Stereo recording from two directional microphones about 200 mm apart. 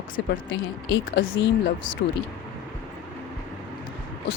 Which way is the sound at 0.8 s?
60° left (ahead or behind).